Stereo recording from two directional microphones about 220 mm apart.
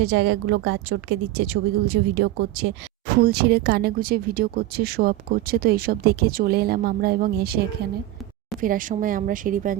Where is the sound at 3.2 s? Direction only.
45° right (ahead or behind).